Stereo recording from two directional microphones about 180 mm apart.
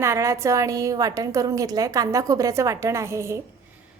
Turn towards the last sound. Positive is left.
turn(degrees=-15)  # may be behind; listen again after turning